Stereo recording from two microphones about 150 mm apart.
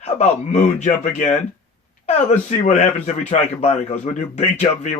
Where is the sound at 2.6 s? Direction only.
50° left (ahead or behind).